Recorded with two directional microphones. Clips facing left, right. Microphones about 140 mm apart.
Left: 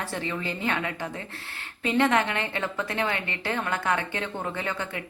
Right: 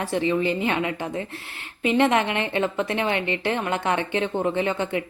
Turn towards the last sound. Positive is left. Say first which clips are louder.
# right 8 dB
turn(degrees=-20)  # may be behind; listen again after turning